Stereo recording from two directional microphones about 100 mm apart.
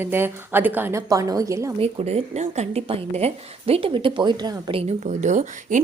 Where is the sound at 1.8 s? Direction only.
90° right; by 4.7 s 45° right (ahead or behind).